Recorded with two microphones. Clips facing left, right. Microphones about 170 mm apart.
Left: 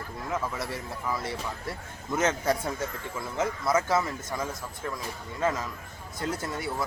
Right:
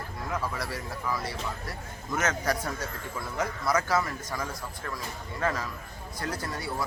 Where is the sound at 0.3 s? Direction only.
25° left (ahead or behind).